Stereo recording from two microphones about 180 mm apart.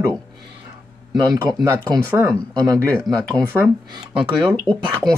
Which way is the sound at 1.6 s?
20° right (ahead or behind).